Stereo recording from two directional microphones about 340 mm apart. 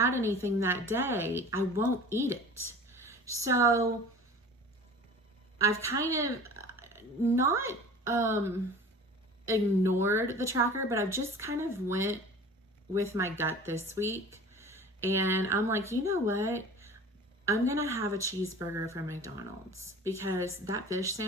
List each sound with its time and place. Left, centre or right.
0.3 s a woman's voice: centre
2.6 s whispering: centre
3.4 s a woman's voice: centre
5.5 s a woman's voice: centre
19.7 s speech: right
20.1 s a woman's voice: centre